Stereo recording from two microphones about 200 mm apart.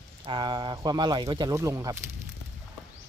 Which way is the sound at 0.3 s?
20° right (ahead or behind).